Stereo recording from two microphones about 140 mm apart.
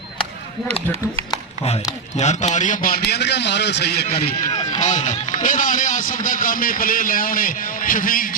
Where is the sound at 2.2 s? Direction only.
55° left (ahead or behind); by 4.4 s 90° left.